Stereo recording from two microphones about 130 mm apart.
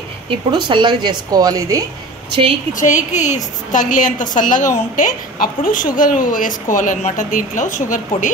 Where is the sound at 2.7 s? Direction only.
75° left (ahead or behind).